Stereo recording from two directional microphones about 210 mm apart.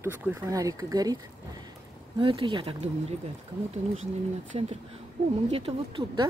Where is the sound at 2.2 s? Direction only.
25° right (ahead or behind).